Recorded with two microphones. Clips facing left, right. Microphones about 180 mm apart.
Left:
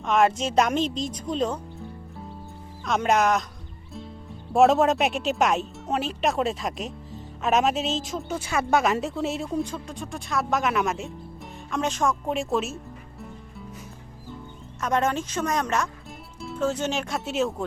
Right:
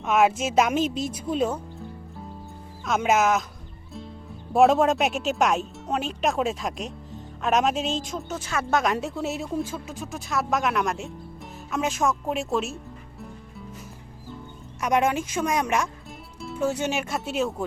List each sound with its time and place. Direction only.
0.0 s a woman's voice: 5° right (ahead or behind)
2.8 s a woman's voice: centre (ahead or behind)
4.5 s a woman's voice: centre (ahead or behind)
11.7 s music: 5° right (ahead or behind)
14.8 s speech: 10° right (ahead or behind)
16.4 s music: centre (ahead or behind)
16.6 s a woman's voice: 10° right (ahead or behind)